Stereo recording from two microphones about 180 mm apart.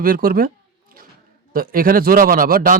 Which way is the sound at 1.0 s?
55° right (ahead or behind).